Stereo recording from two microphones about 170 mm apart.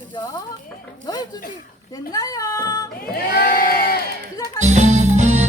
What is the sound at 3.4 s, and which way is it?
Sheep, 60° left (ahead or behind).